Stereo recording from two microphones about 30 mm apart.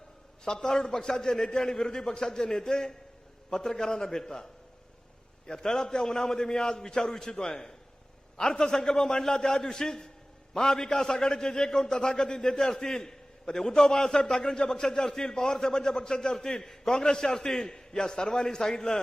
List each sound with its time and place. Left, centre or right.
0.4 s a man's voice: centre
5.5 s a man's voice: left